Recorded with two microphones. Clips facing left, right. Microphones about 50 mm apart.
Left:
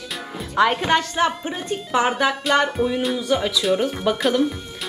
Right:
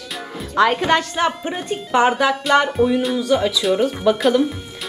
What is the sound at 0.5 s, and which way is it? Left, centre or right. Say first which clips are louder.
Speech: right 2 dB; centre.